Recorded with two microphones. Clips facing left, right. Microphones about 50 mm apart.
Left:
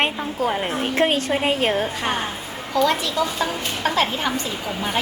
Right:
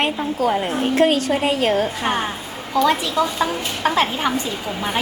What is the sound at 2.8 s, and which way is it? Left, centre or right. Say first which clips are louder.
A woman's voice: right 2 dB; centre.